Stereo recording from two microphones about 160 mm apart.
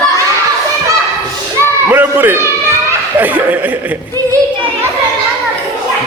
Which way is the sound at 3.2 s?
10° right (ahead or behind).